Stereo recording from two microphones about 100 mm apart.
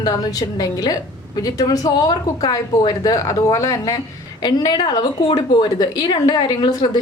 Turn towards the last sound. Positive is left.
turn(degrees=45)  # may be behind; listen again after turning